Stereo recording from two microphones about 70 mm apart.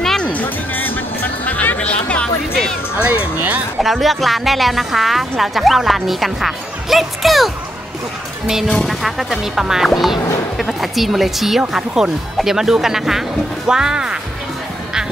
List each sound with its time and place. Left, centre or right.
0.0 s music: centre
0.3 s music: left
3.0 s speech: right
3.8 s speech: centre